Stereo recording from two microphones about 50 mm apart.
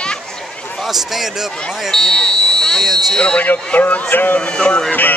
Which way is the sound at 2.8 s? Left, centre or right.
Centre.